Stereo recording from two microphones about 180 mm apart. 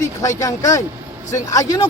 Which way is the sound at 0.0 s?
20° left (ahead or behind).